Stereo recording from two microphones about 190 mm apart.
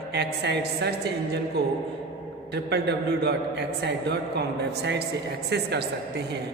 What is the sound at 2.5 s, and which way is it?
A man's voice, 60° right (ahead or behind).